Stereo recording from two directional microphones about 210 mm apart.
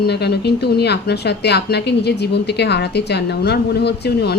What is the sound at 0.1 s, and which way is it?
A woman's voice, 50° left (ahead or behind).